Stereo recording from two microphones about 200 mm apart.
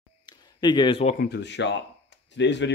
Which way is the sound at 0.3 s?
20° left (ahead or behind).